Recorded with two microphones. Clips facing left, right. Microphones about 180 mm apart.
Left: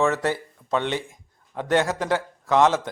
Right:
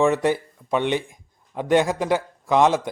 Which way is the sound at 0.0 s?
15° right (ahead or behind).